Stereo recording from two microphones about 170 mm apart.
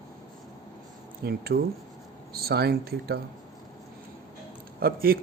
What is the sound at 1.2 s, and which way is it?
Speech, 65° right (ahead or behind).